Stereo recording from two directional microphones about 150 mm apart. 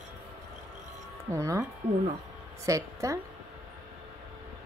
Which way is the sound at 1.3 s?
20° right (ahead or behind).